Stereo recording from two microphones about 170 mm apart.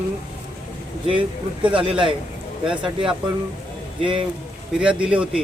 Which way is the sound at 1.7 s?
30° right (ahead or behind).